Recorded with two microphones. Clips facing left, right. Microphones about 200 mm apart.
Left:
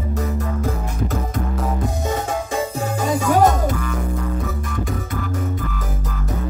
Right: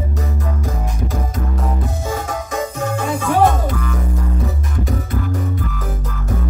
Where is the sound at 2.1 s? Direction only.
30° left (ahead or behind).